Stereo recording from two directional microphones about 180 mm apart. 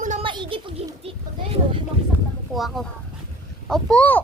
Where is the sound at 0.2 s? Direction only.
30° right (ahead or behind).